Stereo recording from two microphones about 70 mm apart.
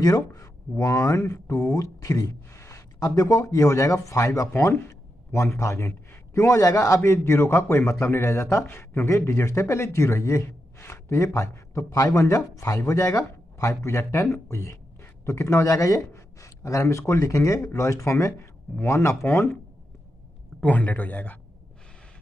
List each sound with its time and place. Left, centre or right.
0.0 s speech: left
20.6 s speech: left